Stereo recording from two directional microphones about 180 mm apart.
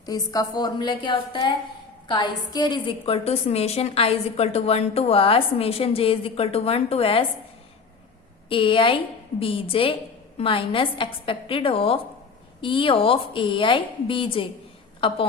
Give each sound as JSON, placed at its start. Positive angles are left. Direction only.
{"t": 0.0, "sound": "a woman's voice", "side_deg": 20}
{"t": 8.4, "sound": "a woman's voice", "side_deg": 30}